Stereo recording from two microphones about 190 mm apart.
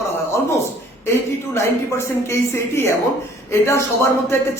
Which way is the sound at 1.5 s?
15° left (ahead or behind).